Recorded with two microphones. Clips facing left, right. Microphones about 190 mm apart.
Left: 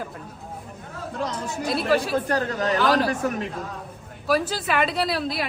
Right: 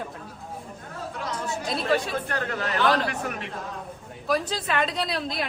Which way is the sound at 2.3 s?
40° left (ahead or behind).